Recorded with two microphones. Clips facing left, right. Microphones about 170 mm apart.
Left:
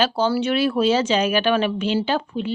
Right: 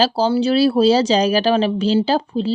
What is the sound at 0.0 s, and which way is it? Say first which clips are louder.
Speech: right 4 dB; 35° right (ahead or behind).